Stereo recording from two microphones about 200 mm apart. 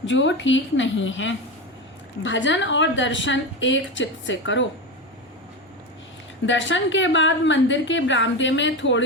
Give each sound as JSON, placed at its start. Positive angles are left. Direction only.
{"t": 0.0, "sound": "a woman's voice", "side_deg": 65}
{"t": 6.4, "sound": "a woman's voice", "side_deg": 65}